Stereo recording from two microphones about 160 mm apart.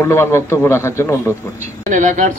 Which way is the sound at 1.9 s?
50° right (ahead or behind).